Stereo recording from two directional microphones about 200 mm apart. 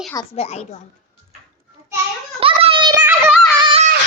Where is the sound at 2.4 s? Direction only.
25° right (ahead or behind).